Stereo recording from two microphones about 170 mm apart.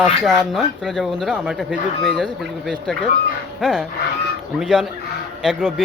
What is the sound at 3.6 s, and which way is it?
Speech, centre (ahead or behind).